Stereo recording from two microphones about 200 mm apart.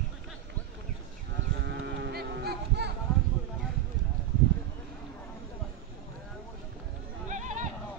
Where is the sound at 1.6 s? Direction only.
55° right (ahead or behind).